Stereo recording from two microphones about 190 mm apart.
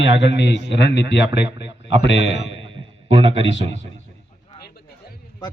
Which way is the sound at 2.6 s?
30° right (ahead or behind).